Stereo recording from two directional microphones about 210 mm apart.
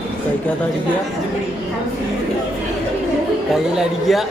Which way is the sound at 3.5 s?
Centre (ahead or behind).